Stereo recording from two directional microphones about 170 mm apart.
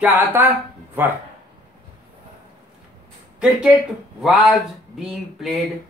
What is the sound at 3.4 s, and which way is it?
Speech, 5° right (ahead or behind).